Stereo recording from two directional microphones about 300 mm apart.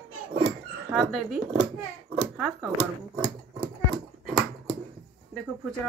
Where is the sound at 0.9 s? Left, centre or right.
Centre.